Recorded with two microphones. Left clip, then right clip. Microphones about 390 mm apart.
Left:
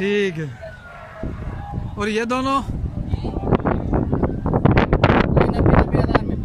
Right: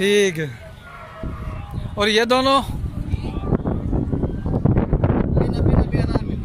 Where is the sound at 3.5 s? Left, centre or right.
Left.